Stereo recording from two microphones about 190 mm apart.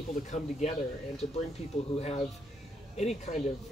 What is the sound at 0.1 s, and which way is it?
Speech, 40° left (ahead or behind).